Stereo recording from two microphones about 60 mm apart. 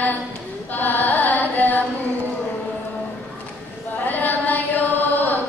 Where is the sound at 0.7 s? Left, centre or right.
Left.